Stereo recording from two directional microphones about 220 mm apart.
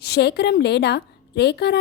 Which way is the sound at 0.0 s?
45° left (ahead or behind).